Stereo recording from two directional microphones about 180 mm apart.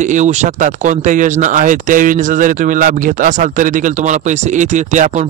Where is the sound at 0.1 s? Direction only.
40° right (ahead or behind).